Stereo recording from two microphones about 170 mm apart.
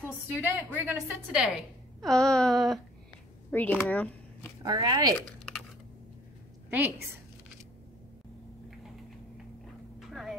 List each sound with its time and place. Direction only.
0.3 s a woman's voice: 10° right (ahead or behind)
2.0 s a sound: 5° left (ahead or behind)
3.5 s speech: 10° left (ahead or behind)
4.6 s speech: 25° right (ahead or behind)
5.2 s crumpling: 5° left (ahead or behind)
9.9 s vehicle: centre (ahead or behind)